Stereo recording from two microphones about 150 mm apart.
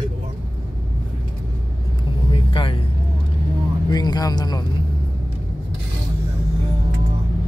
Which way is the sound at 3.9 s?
25° left (ahead or behind).